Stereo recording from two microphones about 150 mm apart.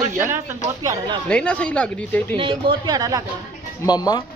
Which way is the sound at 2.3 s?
35° right (ahead or behind).